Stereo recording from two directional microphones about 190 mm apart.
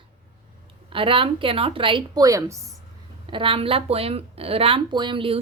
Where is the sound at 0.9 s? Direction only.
25° right (ahead or behind).